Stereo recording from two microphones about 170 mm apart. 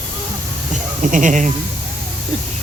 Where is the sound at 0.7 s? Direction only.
50° right (ahead or behind).